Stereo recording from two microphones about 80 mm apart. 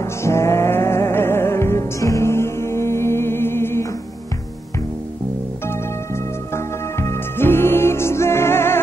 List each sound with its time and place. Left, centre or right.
0.0 s music: left
5.7 s music: left